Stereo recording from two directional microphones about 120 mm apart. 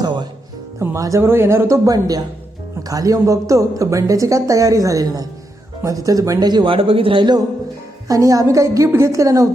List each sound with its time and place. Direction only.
0.0 s music: 40° right (ahead or behind)
0.8 s a woman's voice: 25° right (ahead or behind)
8.0 s a woman's voice: 30° right (ahead or behind)